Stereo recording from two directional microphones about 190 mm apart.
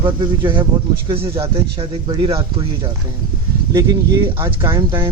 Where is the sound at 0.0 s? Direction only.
25° right (ahead or behind).